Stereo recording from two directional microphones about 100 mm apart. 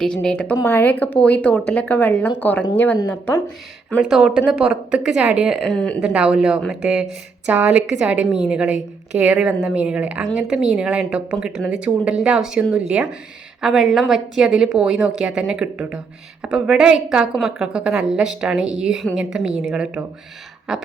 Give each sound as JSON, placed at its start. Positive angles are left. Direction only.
{"t": 0.0, "sound": "a woman's voice", "side_deg": 10}
{"t": 0.6, "sound": "a woman's voice", "side_deg": 20}
{"t": 3.8, "sound": "a woman's voice", "side_deg": 5}
{"t": 4.2, "sound": "a woman's voice", "side_deg": -5}
{"t": 5.6, "sound": "a woman's voice", "side_deg": 5}
{"t": 6.0, "sound": "a woman's voice", "side_deg": -10}